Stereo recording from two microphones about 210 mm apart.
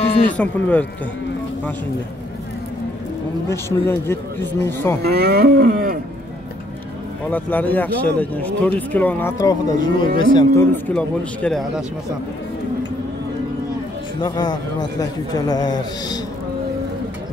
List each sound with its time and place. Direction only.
0.4 s speech: 5° left (ahead or behind)
3.4 s speech: 10° left (ahead or behind)
5.0 s cattle: 50° right (ahead or behind)
7.2 s speech: 10° left (ahead or behind)
14.2 s a man's voice: 20° left (ahead or behind)